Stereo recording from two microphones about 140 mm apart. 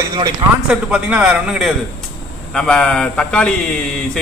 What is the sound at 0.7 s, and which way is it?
A man's voice, 5° right (ahead or behind).